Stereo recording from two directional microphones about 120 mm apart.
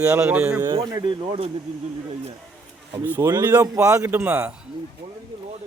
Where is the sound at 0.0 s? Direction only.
20° right (ahead or behind).